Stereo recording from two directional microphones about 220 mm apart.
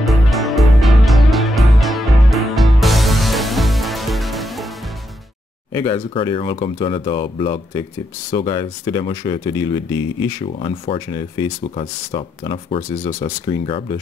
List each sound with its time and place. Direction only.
0.0 s music: centre (ahead or behind)
5.7 s speech: 15° left (ahead or behind)